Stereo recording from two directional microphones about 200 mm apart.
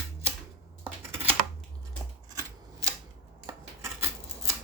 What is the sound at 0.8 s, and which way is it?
Typing, 10° right (ahead or behind).